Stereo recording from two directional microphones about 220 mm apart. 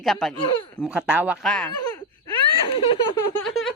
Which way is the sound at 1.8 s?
20° left (ahead or behind).